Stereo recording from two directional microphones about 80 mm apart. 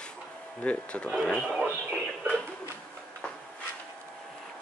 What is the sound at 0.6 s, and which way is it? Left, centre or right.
Speech, centre.